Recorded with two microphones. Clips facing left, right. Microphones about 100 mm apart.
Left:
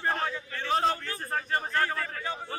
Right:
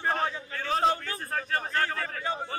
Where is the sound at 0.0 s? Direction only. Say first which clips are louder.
Right 1 dB; centre (ahead or behind).